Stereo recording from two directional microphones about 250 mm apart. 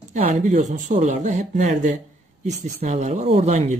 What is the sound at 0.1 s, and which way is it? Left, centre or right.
Speech, right.